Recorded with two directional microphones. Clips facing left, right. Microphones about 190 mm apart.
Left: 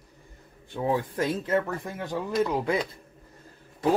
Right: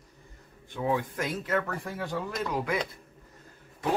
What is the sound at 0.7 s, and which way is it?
Speech, 30° left (ahead or behind).